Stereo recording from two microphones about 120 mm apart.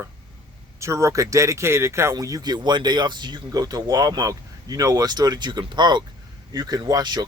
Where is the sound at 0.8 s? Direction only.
25° right (ahead or behind).